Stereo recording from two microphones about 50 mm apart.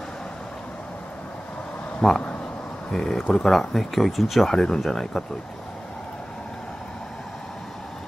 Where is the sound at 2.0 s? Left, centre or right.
Centre.